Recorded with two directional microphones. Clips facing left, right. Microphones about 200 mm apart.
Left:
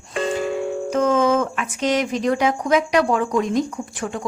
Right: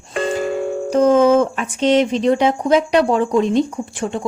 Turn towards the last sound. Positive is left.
turn(degrees=-25)  # may be behind; listen again after turning